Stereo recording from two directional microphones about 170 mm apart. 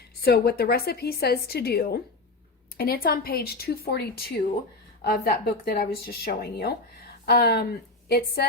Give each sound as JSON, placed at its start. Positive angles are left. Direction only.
{"t": 0.2, "sound": "a woman's voice", "side_deg": 70}